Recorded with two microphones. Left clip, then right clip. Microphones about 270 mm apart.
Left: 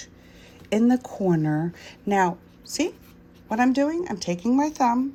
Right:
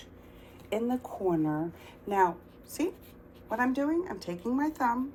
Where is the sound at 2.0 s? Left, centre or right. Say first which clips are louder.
Left 4 dB; left.